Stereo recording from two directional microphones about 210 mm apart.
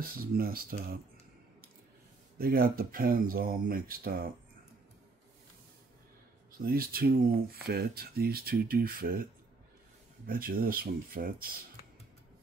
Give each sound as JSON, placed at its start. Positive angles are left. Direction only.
{"t": 0.0, "sound": "speech", "side_deg": -45}
{"t": 2.3, "sound": "speech", "side_deg": -45}
{"t": 6.6, "sound": "speech", "side_deg": -45}